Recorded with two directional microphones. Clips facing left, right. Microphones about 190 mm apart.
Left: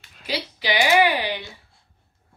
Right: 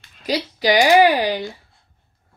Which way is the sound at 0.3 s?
40° right (ahead or behind).